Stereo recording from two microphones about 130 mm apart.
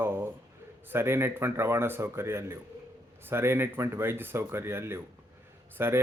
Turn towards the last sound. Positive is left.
turn(degrees=-20)  # may be behind; listen again after turning